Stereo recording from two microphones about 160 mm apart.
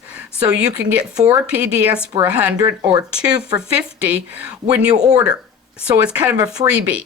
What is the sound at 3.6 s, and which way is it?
Speech, 5° right (ahead or behind).